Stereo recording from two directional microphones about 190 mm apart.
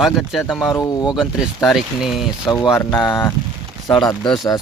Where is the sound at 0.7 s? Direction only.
20° left (ahead or behind).